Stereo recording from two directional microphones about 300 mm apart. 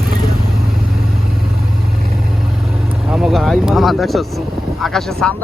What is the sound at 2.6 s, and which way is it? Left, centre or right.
Vehicle, centre.